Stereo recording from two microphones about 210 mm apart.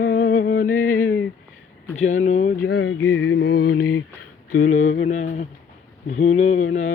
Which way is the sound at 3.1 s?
60° left (ahead or behind).